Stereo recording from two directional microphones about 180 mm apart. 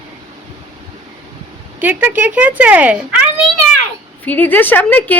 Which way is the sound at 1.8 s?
10° right (ahead or behind).